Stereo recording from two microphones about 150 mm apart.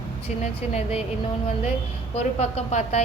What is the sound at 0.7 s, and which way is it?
Speech, 45° left (ahead or behind).